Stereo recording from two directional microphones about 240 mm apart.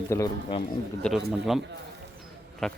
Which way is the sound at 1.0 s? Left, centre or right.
Centre.